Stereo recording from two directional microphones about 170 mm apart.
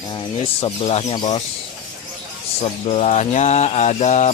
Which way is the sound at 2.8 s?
40° left (ahead or behind).